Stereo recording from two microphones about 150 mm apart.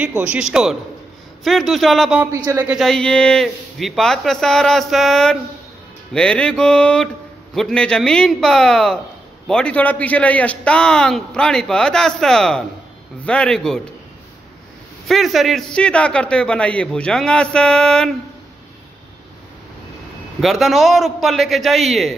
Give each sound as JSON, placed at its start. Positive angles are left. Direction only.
{"t": 0.0, "sound": "a man's voice", "side_deg": -10}
{"t": 2.3, "sound": "speech", "side_deg": -20}
{"t": 2.6, "sound": "a man's voice", "side_deg": 0}
{"t": 15.0, "sound": "a man's voice", "side_deg": 0}
{"t": 20.3, "sound": "a man's voice", "side_deg": 0}